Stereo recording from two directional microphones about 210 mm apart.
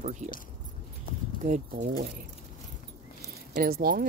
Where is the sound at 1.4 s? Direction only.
35° right (ahead or behind).